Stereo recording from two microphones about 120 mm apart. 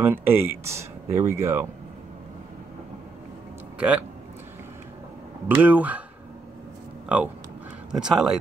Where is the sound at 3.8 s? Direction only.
10° right (ahead or behind).